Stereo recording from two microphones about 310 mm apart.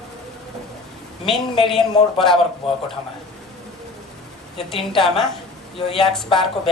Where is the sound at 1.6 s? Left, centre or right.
Centre.